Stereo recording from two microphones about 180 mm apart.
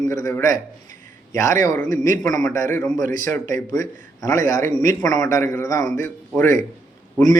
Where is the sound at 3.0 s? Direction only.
50° right (ahead or behind).